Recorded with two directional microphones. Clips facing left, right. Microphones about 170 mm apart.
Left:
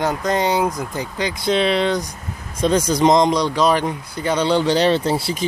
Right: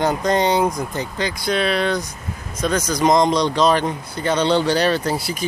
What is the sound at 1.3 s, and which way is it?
Speech, 25° left (ahead or behind).